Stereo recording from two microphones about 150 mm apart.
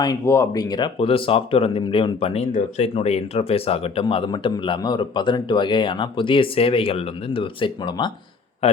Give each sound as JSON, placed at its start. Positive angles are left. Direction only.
{"t": 0.0, "sound": "speech", "side_deg": 20}
{"t": 0.9, "sound": "speech", "side_deg": 40}
{"t": 8.6, "sound": "a man's voice", "side_deg": 45}